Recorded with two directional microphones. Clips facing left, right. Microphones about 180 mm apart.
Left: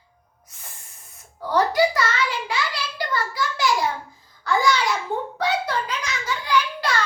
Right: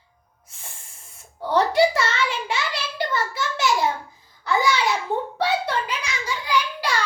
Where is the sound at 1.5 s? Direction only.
25° right (ahead or behind).